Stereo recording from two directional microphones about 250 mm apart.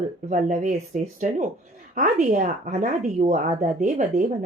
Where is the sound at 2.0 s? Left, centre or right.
Right.